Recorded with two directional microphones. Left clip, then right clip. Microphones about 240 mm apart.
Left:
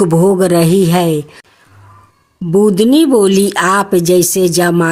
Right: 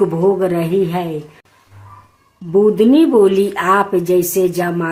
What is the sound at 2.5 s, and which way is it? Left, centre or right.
A woman's voice, left.